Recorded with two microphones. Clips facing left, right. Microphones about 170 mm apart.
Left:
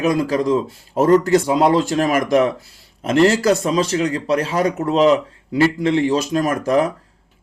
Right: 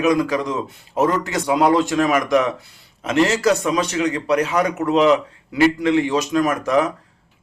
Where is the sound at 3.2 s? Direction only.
35° left (ahead or behind).